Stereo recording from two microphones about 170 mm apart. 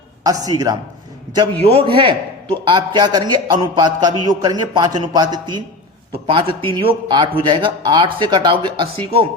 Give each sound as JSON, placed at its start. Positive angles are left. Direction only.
{"t": 0.3, "sound": "a man's voice", "side_deg": -20}
{"t": 1.6, "sound": "a man's voice", "side_deg": -35}